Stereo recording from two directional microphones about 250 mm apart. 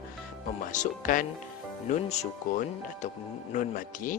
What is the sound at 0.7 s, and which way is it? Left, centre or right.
A man's voice, left.